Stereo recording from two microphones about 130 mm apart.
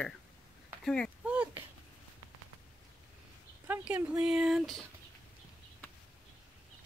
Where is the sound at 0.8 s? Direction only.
10° left (ahead or behind).